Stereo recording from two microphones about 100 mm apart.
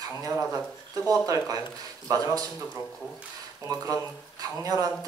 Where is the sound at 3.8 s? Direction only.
35° right (ahead or behind).